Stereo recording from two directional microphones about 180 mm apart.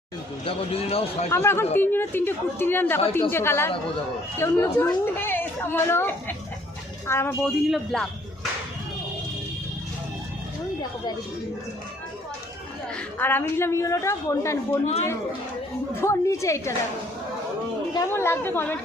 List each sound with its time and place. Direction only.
0.4 s speech: 35° left (ahead or behind)
1.3 s a woman's voice: 15° left (ahead or behind)
7.4 s speech: centre (ahead or behind)
13.1 s a woman's voice: 10° left (ahead or behind)
16.0 s a woman's voice: 15° left (ahead or behind)
17.9 s a woman's voice: 15° left (ahead or behind)